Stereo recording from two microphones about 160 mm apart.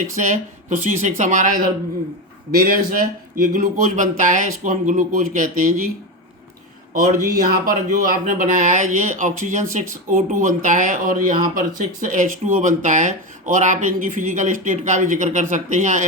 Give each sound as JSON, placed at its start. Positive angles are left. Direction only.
{"t": 0.1, "sound": "speech", "side_deg": -50}
{"t": 7.3, "sound": "speech", "side_deg": -65}